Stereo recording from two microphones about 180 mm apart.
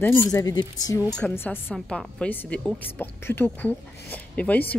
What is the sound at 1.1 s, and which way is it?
A woman's voice, 10° left (ahead or behind).